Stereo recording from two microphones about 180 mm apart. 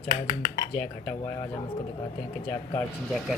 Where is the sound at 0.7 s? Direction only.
25° left (ahead or behind).